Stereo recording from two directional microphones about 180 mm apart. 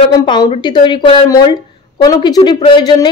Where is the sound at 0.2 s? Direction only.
25° left (ahead or behind).